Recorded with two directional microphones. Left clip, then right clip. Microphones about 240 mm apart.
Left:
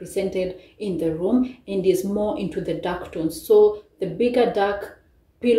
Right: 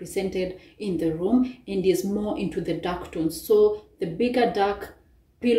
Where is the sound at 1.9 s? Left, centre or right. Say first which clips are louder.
Left 5 dB; left.